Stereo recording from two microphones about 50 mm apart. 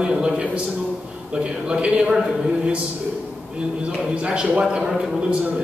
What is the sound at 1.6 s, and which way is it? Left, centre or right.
Speech, right.